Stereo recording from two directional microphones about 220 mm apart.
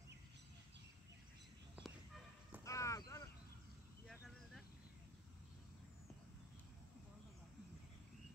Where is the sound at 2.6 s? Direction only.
15° left (ahead or behind).